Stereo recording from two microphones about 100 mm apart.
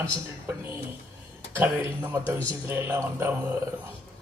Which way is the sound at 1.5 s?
20° right (ahead or behind).